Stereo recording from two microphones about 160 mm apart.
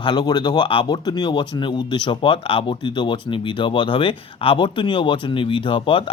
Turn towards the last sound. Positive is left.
turn(degrees=35)  # may be behind; listen again after turning